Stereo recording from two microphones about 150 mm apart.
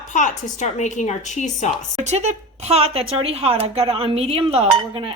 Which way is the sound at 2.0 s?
50° right (ahead or behind).